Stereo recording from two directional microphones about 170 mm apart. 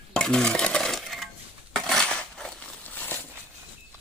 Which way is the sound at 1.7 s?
5° left (ahead or behind).